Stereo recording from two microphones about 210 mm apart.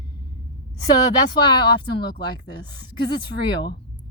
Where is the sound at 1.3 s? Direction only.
20° left (ahead or behind).